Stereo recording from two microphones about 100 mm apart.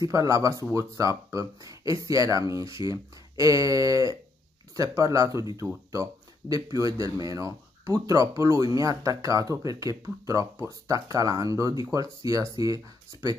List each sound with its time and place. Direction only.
0.0 s speech: 35° right (ahead or behind)
6.5 s speech: 35° right (ahead or behind)